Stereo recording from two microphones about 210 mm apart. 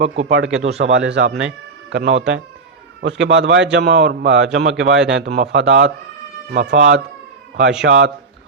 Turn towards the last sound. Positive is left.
turn(degrees=-55)  # may be behind; listen again after turning